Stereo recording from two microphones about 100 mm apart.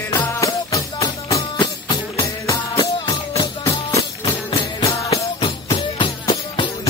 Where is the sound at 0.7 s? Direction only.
35° left (ahead or behind).